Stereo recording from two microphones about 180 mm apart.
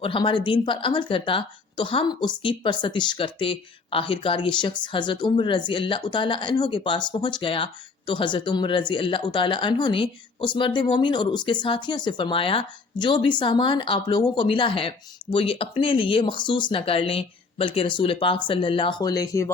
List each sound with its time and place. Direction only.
0.0 s speech: 30° left (ahead or behind)